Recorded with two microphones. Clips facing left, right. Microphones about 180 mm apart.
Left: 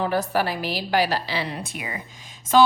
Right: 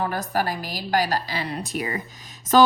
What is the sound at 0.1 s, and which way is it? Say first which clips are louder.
A woman's voice: left 2 dB; 45° right (ahead or behind).